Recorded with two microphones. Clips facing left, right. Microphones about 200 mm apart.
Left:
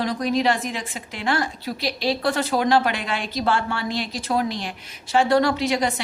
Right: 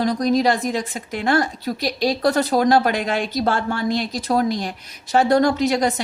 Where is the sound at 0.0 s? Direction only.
40° right (ahead or behind).